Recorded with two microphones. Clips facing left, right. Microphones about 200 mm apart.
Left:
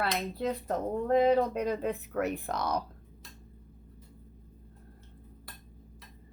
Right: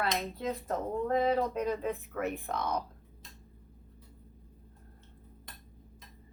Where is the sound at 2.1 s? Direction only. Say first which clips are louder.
Left 4 dB; 55° left (ahead or behind).